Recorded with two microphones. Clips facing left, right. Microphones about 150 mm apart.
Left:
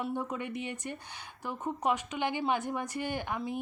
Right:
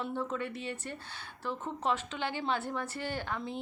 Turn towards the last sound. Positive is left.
turn(degrees=15)  # may be behind; listen again after turning